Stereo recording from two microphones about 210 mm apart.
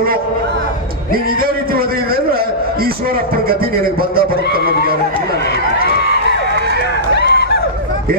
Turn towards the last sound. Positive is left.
turn(degrees=50)  # may be behind; listen again after turning